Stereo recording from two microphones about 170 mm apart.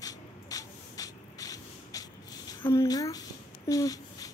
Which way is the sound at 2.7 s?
20° left (ahead or behind).